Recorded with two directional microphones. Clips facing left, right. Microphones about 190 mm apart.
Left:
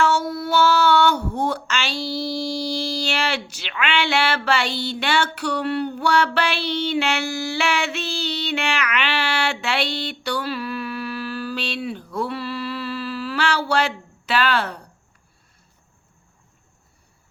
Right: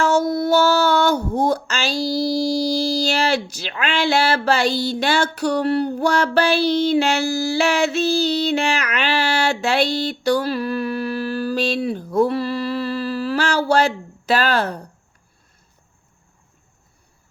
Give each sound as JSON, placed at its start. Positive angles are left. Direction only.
{"t": 0.0, "sound": "speech", "side_deg": -40}